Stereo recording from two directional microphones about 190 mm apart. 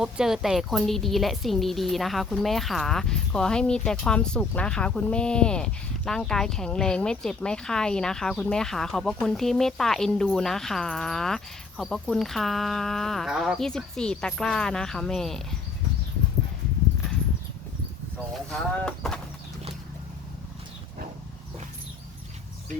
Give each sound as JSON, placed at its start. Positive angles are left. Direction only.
{"t": 0.0, "sound": "speech", "side_deg": -5}
{"t": 18.3, "sound": "speech", "side_deg": 0}